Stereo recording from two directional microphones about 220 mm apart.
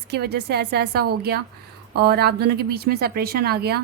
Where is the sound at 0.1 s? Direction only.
50° right (ahead or behind).